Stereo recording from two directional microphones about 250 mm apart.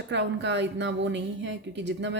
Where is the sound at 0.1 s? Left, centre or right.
Right.